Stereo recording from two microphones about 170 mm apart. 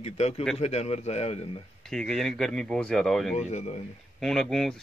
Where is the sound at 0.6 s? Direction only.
35° left (ahead or behind).